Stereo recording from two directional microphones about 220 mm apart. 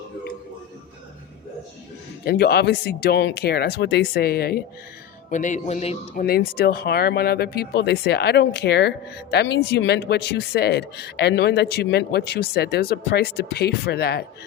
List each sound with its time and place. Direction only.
2.2 s speech: 45° left (ahead or behind)
5.3 s speech: 35° left (ahead or behind)
6.2 s speech: 45° left (ahead or behind)